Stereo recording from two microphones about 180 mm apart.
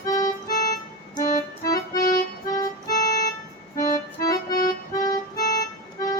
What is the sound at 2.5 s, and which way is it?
Music, 20° left (ahead or behind).